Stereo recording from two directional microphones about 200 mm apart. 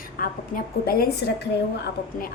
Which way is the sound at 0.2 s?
45° left (ahead or behind).